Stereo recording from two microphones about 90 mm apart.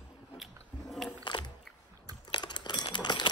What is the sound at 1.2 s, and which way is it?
Biting, 55° left (ahead or behind).